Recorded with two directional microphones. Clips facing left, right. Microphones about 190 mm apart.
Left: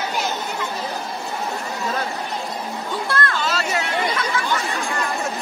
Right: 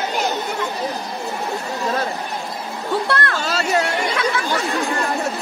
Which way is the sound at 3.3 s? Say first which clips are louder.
Right 3 dB; 40° right (ahead or behind).